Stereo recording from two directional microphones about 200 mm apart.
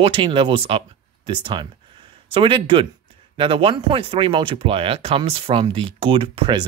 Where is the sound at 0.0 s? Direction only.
25° right (ahead or behind).